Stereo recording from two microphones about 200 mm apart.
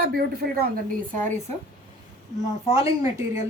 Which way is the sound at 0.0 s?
50° right (ahead or behind).